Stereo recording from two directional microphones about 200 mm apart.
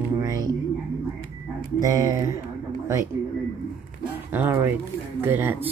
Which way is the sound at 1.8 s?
15° right (ahead or behind).